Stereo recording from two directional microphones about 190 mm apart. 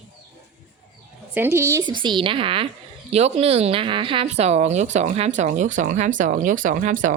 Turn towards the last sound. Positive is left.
turn(degrees=-45)  # may be behind; listen again after turning